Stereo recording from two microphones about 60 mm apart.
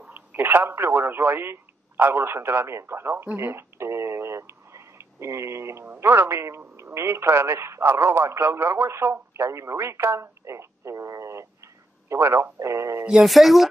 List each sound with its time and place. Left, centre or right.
0.1 s speech: right
3.3 s a sound: right
5.9 s speech: right
13.2 s speech: centre